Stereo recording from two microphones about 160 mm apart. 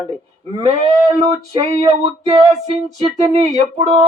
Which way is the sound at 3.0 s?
45° right (ahead or behind).